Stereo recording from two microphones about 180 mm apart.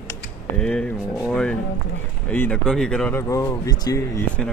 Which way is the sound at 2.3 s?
5° left (ahead or behind).